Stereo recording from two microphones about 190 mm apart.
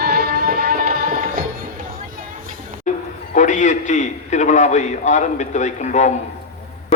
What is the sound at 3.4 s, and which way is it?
A man's voice, 40° left (ahead or behind).